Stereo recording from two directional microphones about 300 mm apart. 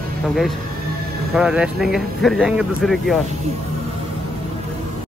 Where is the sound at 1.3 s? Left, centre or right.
Centre.